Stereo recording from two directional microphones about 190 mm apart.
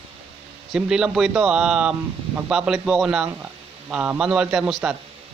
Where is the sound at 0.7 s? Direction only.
5° right (ahead or behind).